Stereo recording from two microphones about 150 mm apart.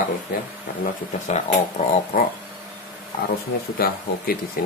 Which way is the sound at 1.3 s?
50° left (ahead or behind).